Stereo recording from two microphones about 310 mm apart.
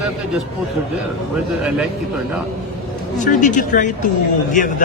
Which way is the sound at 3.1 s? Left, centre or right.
Left.